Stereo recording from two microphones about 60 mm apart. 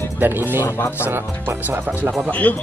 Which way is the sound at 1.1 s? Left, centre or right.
Right.